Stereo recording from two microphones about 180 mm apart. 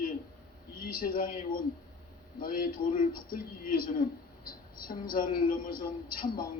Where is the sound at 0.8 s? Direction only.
55° left (ahead or behind).